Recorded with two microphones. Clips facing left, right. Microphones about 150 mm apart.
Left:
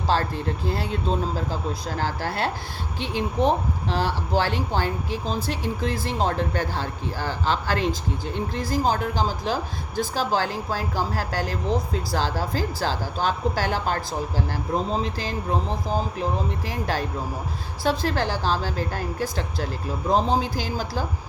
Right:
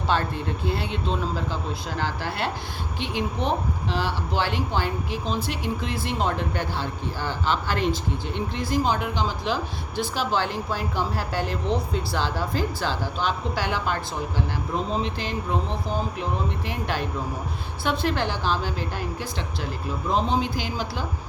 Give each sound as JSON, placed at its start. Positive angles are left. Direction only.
{"t": 0.1, "sound": "a woman's voice", "side_deg": 40}